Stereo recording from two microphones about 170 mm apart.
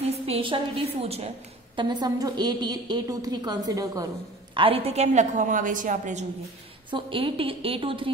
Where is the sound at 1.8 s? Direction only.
25° right (ahead or behind).